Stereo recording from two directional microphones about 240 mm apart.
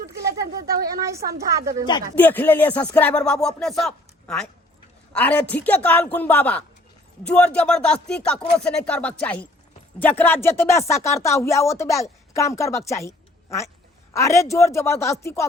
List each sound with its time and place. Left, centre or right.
0.7 s a sound: right
1.0 s a woman's voice: centre
2.1 s music: centre
7.3 s speech: centre
10.0 s music: centre
12.3 s a woman's voice: centre
14.1 s music: centre